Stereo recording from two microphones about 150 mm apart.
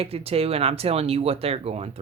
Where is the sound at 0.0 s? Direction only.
40° right (ahead or behind).